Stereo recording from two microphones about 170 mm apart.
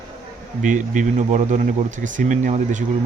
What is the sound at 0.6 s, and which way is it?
Speech, 45° right (ahead or behind).